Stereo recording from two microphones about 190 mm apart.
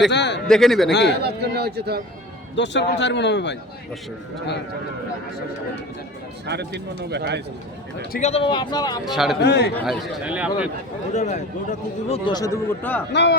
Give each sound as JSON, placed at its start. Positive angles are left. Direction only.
{"t": 0.1, "sound": "a man's voice", "side_deg": 65}
{"t": 0.4, "sound": "a man's voice", "side_deg": 0}
{"t": 0.9, "sound": "a man's voice", "side_deg": 65}
{"t": 1.2, "sound": "speech", "side_deg": -60}
{"t": 2.6, "sound": "a man's voice", "side_deg": 65}
{"t": 6.5, "sound": "speech", "side_deg": -60}
{"t": 8.1, "sound": "speech", "side_deg": 35}
{"t": 9.1, "sound": "a man's voice", "side_deg": 0}
{"t": 9.4, "sound": "a man's voice", "side_deg": 60}
{"t": 9.8, "sound": "a man's voice", "side_deg": 0}
{"t": 11.1, "sound": "speech", "side_deg": 40}
{"t": 12.0, "sound": "speech", "side_deg": 30}
{"t": 13.1, "sound": "a man's voice", "side_deg": 65}